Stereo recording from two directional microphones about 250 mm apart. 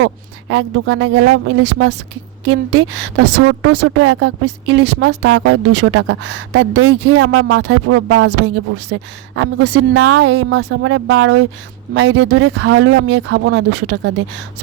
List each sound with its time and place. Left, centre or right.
0.0 s speech: right